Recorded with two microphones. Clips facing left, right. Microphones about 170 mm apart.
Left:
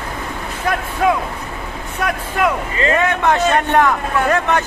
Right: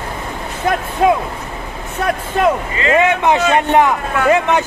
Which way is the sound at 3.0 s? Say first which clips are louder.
Right 4 dB; 15° right (ahead or behind).